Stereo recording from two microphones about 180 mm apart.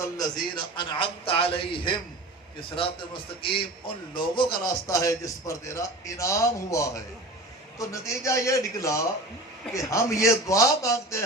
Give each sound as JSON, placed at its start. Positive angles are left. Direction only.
{"t": 0.0, "sound": "a man's voice", "side_deg": 20}